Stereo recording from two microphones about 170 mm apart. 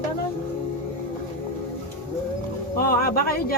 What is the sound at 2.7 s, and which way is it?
Speech, 60° left (ahead or behind).